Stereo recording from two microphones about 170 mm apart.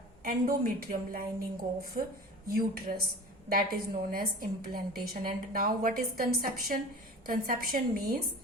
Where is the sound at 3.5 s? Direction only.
60° right (ahead or behind).